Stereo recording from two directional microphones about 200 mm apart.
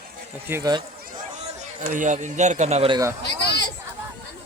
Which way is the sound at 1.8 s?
40° right (ahead or behind).